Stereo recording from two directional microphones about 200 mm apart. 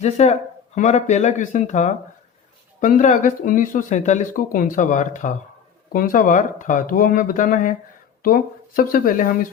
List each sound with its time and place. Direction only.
0.0 s speech: 35° left (ahead or behind)